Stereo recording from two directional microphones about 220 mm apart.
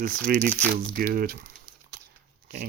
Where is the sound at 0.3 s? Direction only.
45° right (ahead or behind).